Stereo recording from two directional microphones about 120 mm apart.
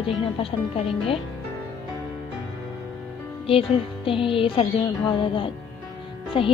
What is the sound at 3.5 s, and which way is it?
A woman's voice, 50° left (ahead or behind).